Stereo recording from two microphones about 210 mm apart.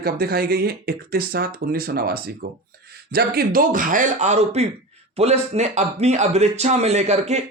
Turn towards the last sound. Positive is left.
turn(degrees=-30)  # may be behind; listen again after turning